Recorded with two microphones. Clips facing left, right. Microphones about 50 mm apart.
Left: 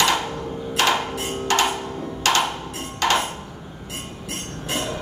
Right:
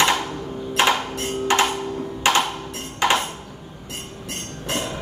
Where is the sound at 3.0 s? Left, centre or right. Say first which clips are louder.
Right 1 dB; right.